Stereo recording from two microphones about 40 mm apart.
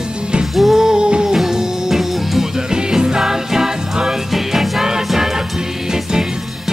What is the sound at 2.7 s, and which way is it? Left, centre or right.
Music, centre.